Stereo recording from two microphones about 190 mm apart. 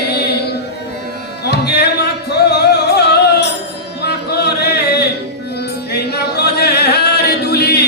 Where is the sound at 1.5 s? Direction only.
60° left (ahead or behind).